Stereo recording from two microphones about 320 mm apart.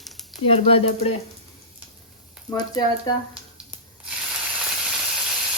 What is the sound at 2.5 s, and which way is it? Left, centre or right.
Speech, centre.